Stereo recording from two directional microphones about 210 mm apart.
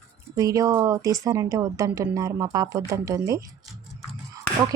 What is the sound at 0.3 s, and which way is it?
A woman's voice, 15° right (ahead or behind).